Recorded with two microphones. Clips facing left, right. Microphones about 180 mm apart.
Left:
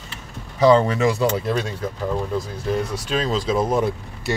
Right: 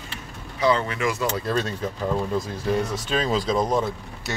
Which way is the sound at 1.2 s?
20° left (ahead or behind).